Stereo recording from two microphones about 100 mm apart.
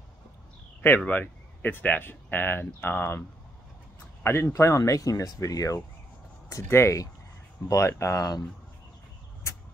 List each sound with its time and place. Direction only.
0.8 s speech: 20° left (ahead or behind); by 8.5 s 35° left (ahead or behind)